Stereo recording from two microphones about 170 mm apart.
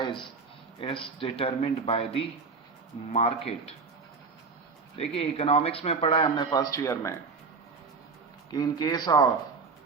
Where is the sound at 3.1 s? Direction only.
35° left (ahead or behind).